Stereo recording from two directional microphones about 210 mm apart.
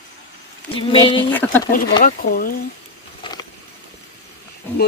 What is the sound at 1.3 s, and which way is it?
Speech, 10° left (ahead or behind).